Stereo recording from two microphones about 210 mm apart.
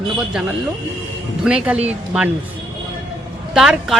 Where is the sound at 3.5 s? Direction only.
Centre (ahead or behind).